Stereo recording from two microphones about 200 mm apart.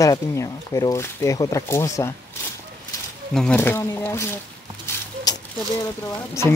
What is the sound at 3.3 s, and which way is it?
Speech, 5° left (ahead or behind).